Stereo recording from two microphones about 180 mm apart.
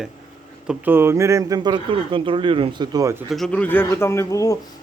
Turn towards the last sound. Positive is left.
turn(degrees=20)  # may be behind; listen again after turning